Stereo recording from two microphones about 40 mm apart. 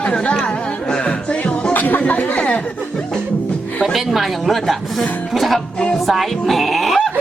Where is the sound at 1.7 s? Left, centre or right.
Left.